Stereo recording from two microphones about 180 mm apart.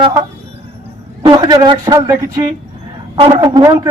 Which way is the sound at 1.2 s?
25° right (ahead or behind).